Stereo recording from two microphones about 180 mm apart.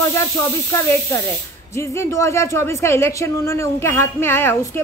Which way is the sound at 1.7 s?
15° left (ahead or behind).